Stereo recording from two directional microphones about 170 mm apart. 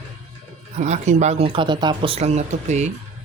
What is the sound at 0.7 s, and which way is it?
Speech, 45° right (ahead or behind).